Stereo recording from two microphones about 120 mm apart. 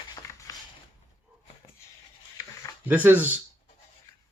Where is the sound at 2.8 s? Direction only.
15° right (ahead or behind).